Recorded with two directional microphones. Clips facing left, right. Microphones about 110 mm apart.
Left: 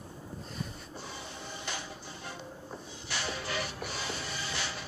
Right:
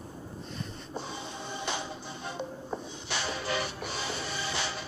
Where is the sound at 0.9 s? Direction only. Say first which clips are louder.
Right 5 dB; 20° right (ahead or behind).